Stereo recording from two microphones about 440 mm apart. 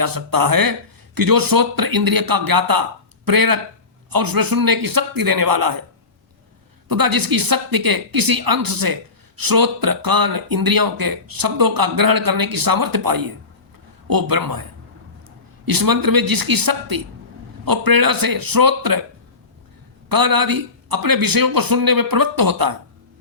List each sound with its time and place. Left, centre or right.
0.0 s speech: right
6.8 s speech: right
15.6 s speech: right
20.1 s speech: right